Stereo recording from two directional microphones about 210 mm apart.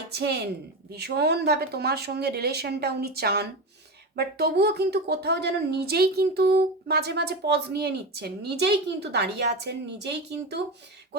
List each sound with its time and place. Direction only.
0.1 s speech: 50° right (ahead or behind)